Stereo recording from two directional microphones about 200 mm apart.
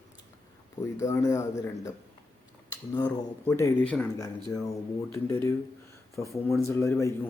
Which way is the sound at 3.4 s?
10° left (ahead or behind).